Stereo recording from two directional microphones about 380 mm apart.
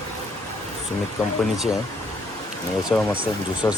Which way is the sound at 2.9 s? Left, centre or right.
Centre.